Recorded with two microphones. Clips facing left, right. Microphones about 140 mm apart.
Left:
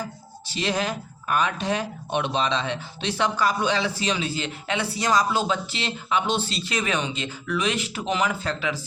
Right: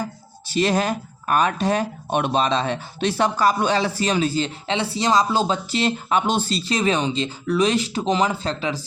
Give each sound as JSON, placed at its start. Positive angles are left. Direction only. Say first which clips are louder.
{"t": 0.4, "sound": "speech", "louder": "right 6 dB", "side_deg": -45}